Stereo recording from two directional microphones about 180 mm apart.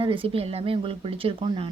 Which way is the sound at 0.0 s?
30° right (ahead or behind).